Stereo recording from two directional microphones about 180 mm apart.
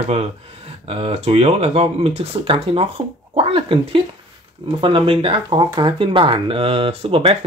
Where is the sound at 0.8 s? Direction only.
35° right (ahead or behind).